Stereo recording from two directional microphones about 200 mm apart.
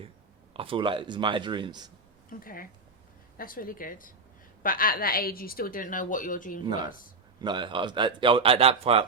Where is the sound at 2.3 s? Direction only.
45° left (ahead or behind).